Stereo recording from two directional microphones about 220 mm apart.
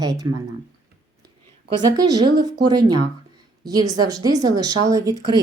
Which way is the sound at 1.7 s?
15° right (ahead or behind).